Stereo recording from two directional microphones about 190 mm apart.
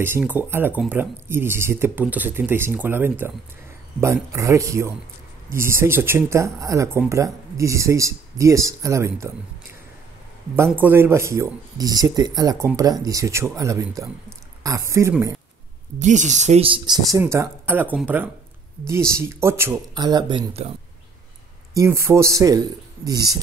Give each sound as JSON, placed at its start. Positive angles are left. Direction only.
{"t": 0.0, "sound": "speech", "side_deg": -10}
{"t": 10.5, "sound": "speech", "side_deg": -10}
{"t": 16.0, "sound": "speech", "side_deg": -40}
{"t": 21.7, "sound": "speech", "side_deg": -15}